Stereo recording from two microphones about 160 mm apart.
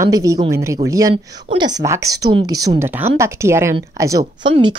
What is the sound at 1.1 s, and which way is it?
A woman's voice, 30° right (ahead or behind).